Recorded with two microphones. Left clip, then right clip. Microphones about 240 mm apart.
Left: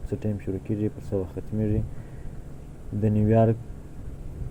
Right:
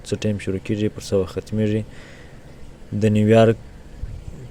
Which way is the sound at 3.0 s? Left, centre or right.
Right.